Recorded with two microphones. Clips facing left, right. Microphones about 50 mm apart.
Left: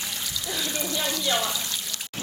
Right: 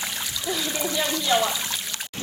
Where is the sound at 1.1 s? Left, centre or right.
Right.